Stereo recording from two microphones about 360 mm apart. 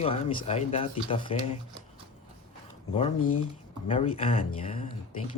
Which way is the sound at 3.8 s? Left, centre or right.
Centre.